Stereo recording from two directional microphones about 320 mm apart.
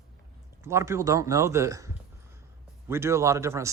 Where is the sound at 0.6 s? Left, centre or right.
Centre.